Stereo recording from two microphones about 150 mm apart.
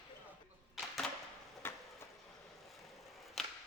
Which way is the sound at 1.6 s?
15° left (ahead or behind).